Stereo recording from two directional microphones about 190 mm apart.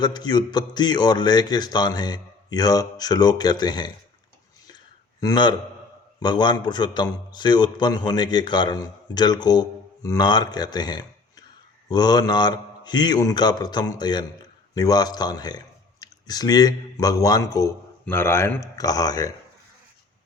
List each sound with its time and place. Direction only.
0.0 s a man's voice: 25° left (ahead or behind)
5.2 s a man's voice: 20° left (ahead or behind)